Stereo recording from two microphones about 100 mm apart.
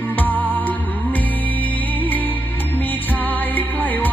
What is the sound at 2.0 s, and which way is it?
Music, 15° left (ahead or behind).